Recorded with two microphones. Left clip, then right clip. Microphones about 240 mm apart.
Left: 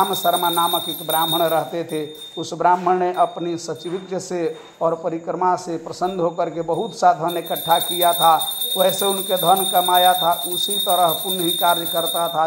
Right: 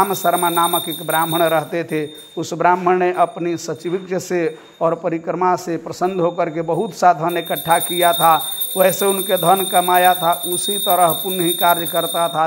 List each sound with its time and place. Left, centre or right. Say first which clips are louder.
0.0 s a man's voice: right 2 dB; right